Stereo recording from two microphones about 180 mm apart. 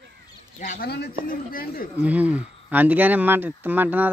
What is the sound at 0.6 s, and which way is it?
Speech, 45° left (ahead or behind).